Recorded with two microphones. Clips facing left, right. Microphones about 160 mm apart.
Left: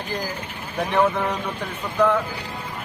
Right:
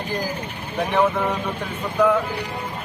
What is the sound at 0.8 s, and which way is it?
Speech, 10° right (ahead or behind).